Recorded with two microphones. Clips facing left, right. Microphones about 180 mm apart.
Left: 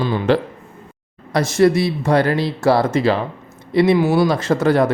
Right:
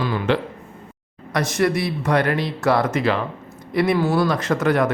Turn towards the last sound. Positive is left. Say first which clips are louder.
# left 3 dB
turn(degrees=30)  # may be behind; listen again after turning